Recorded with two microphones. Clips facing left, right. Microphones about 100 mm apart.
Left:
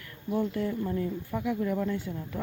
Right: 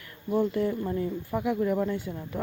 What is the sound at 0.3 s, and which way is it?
Speech, centre (ahead or behind).